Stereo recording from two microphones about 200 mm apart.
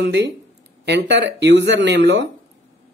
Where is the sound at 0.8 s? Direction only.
60° right (ahead or behind).